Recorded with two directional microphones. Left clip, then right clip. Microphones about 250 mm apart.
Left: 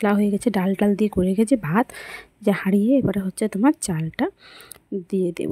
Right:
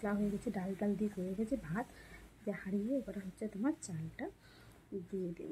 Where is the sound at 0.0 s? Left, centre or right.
Left.